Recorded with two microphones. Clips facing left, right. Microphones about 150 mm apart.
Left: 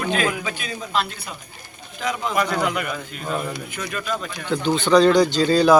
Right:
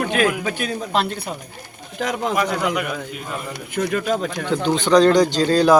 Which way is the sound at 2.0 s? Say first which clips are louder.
Right 3 dB; 70° right (ahead or behind).